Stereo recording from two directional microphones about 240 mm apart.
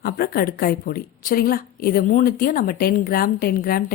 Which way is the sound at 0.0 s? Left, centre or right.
Left.